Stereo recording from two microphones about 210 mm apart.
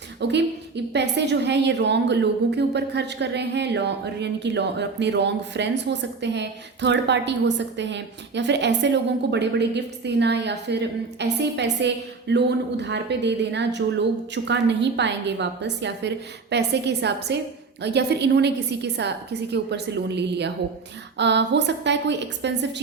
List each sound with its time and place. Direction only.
0.2 s a woman's voice: 55° right (ahead or behind)